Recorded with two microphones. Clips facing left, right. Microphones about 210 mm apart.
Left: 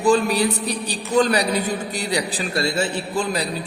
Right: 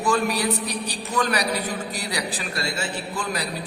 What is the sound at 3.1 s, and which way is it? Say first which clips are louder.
Speech: left 7 dB; 25° left (ahead or behind).